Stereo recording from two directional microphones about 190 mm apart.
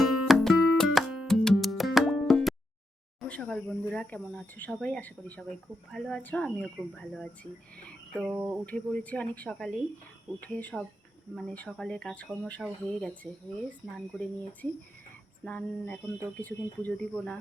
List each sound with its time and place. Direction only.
0.0 s music: centre (ahead or behind)
3.2 s speech: 5° left (ahead or behind)
8.2 s cricket: 5° right (ahead or behind)
8.6 s speech: 5° left (ahead or behind)